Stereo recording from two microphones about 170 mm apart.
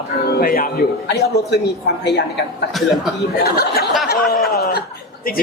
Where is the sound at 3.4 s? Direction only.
65° left (ahead or behind).